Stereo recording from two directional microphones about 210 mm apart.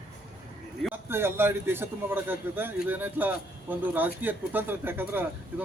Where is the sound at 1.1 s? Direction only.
10° right (ahead or behind).